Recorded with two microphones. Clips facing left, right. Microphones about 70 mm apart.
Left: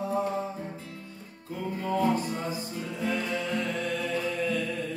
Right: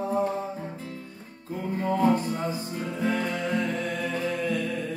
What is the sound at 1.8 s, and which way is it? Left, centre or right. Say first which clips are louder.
Music: right 3 dB; right.